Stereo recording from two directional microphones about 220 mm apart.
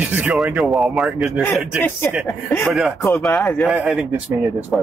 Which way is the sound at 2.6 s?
Centre (ahead or behind).